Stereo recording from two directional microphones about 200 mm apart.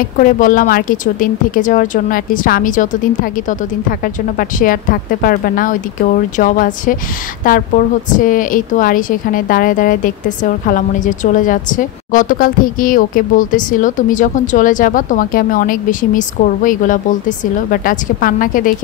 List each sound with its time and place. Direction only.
0.2 s a woman's voice: 40° left (ahead or behind)
4.4 s a woman's voice: 45° left (ahead or behind)